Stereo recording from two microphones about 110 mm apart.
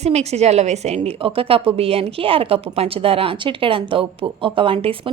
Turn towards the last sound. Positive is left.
turn(degrees=-55)  # may be behind; listen again after turning